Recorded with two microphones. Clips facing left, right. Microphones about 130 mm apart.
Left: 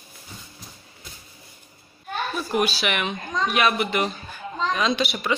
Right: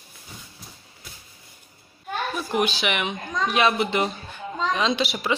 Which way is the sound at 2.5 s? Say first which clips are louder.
Even; 20° right (ahead or behind).